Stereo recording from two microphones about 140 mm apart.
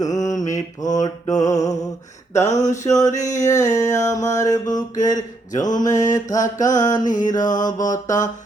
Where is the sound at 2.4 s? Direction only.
55° left (ahead or behind).